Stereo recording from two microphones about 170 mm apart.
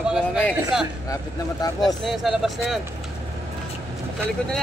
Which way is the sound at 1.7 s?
Centre (ahead or behind).